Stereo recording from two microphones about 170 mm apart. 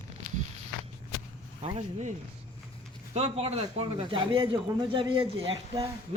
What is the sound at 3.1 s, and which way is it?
Speech, 35° right (ahead or behind).